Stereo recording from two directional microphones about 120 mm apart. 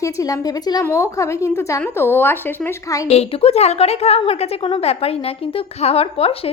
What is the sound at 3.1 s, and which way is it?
A woman's voice, 60° left (ahead or behind).